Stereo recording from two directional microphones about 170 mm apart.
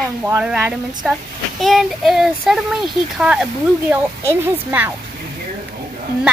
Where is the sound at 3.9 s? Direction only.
15° right (ahead or behind).